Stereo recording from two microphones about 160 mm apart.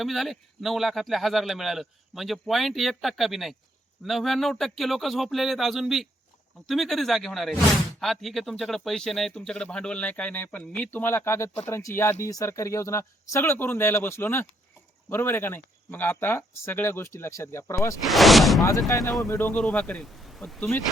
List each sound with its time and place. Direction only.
0.0 s speech: centre (ahead or behind); by 17.9 s 15° left (ahead or behind)
18.0 s speech: centre (ahead or behind)
18.6 s speech: 20° left (ahead or behind); by 20.7 s centre (ahead or behind)